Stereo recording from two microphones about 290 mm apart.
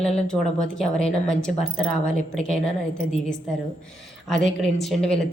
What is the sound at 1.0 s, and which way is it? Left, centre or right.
Speech, left.